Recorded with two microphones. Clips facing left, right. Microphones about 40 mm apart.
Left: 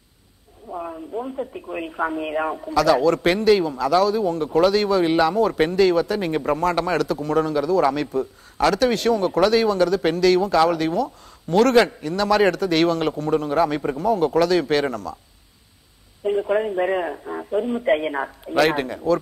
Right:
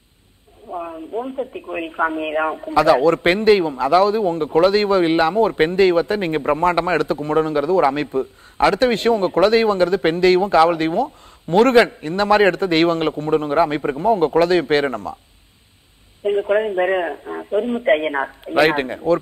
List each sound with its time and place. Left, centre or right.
0.7 s a man's voice: centre
16.2 s speech: right